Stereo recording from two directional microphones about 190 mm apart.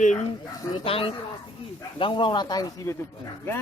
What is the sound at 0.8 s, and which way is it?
Speech, 30° left (ahead or behind).